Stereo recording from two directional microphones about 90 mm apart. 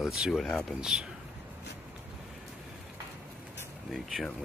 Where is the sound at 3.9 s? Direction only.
Centre (ahead or behind).